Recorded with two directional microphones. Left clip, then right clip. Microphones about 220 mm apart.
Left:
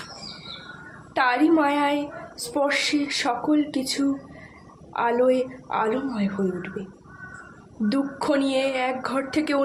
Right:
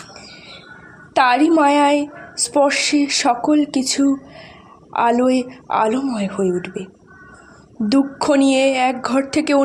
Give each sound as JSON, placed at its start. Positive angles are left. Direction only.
{"t": 1.1, "sound": "a woman's voice", "side_deg": -40}
{"t": 7.9, "sound": "a woman's voice", "side_deg": -40}